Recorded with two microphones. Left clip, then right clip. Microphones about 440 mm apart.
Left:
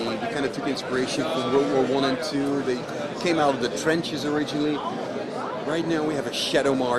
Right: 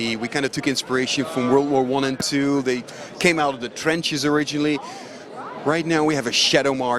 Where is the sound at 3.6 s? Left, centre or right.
Right.